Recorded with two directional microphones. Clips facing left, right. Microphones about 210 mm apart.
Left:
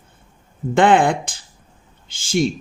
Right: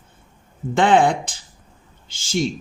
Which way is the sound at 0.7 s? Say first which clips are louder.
Left 1 dB; 55° left (ahead or behind).